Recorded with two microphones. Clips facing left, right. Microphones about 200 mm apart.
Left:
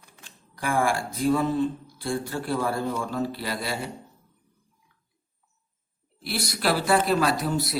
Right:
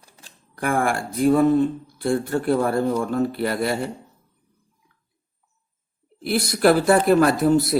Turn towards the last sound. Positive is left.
turn(degrees=-50)  # may be behind; listen again after turning